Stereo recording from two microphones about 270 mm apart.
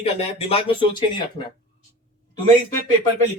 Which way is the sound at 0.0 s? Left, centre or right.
Left.